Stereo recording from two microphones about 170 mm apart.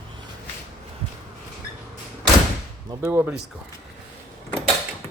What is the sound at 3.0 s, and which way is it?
Speech, 10° right (ahead or behind).